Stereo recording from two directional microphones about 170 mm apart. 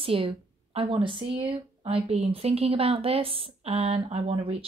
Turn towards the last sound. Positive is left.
turn(degrees=-35)  # may be behind; listen again after turning